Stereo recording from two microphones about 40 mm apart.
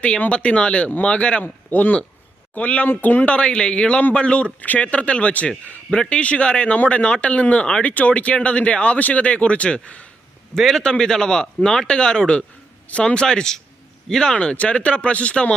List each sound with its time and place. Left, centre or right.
0.3 s a man's voice: left
3.0 s speech: left
3.2 s a man's voice: left
4.6 s speech: left
4.9 s a man's voice: left
9.0 s speech: left
10.8 s a man's voice: centre
14.5 s speech: left